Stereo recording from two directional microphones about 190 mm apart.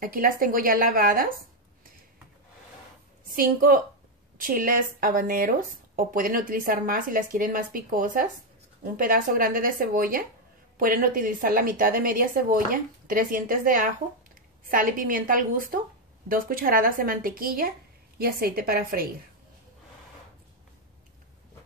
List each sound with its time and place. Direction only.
0.0 s speech: 50° right (ahead or behind)
3.3 s a woman's voice: 50° right (ahead or behind)